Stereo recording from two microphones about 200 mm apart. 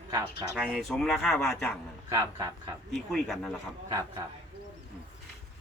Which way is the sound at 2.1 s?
15° right (ahead or behind).